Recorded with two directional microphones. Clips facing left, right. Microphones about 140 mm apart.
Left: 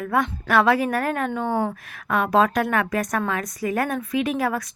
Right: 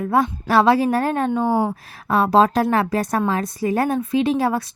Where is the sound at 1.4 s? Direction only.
5° right (ahead or behind).